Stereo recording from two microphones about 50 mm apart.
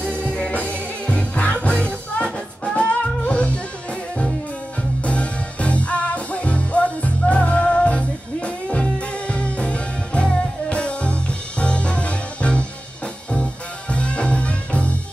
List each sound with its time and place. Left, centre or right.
0.2 s music: left